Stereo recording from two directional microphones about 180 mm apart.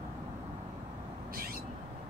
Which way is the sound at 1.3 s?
55° right (ahead or behind).